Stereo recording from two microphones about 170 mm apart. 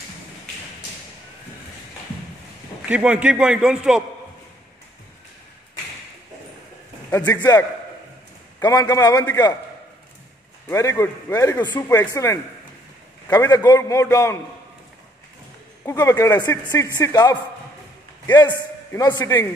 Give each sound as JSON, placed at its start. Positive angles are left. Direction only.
{"t": 2.9, "sound": "a man's voice", "side_deg": -5}
{"t": 7.2, "sound": "a man's voice", "side_deg": 25}
{"t": 10.7, "sound": "a man's voice", "side_deg": 15}
{"t": 15.8, "sound": "a man's voice", "side_deg": 15}